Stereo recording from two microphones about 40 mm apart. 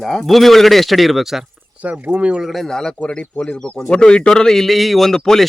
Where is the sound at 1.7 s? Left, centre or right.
Right.